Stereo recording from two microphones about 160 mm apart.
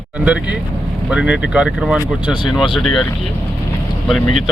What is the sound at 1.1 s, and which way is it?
Speech, 5° right (ahead or behind).